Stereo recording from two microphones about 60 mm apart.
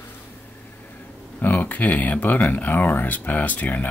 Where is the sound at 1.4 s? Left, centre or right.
Left.